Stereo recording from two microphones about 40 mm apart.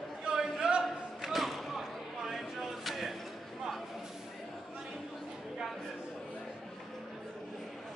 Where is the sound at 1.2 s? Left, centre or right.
Centre.